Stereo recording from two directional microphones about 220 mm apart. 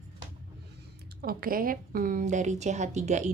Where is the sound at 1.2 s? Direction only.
40° right (ahead or behind).